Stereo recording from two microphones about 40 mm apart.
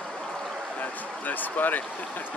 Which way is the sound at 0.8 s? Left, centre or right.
Left.